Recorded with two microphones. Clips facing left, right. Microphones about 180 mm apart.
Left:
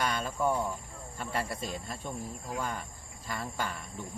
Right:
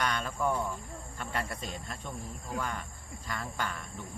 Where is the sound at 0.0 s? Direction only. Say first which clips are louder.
Left 1 dB; 5° left (ahead or behind).